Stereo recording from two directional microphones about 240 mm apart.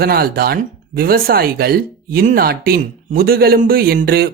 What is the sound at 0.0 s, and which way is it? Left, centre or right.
Speech, right.